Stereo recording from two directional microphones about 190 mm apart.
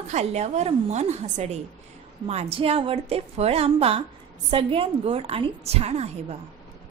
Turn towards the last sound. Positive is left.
turn(degrees=-35)  # may be behind; listen again after turning